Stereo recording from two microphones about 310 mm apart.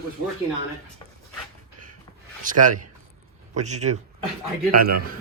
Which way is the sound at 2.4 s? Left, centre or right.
Right.